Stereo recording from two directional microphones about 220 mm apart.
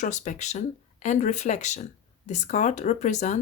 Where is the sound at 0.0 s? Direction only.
30° left (ahead or behind).